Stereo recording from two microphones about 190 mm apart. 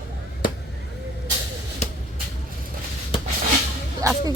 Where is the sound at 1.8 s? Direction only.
35° left (ahead or behind).